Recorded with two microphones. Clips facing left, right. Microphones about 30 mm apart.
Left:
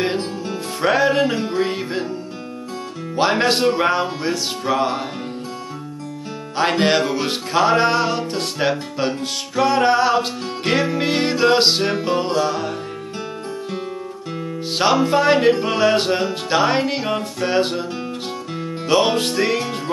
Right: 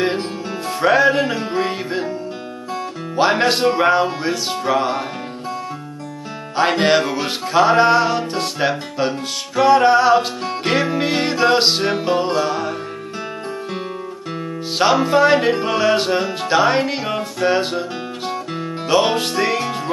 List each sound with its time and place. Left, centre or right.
0.7 s music: centre
3.2 s music: centre
6.5 s music: centre
15.0 s music: centre
18.9 s music: centre